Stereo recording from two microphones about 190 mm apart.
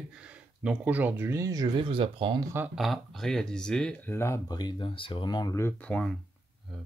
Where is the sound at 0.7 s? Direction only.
10° right (ahead or behind); by 2.4 s 25° right (ahead or behind).